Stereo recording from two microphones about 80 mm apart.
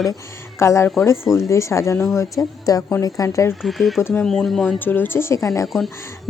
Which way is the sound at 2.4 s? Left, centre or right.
Left.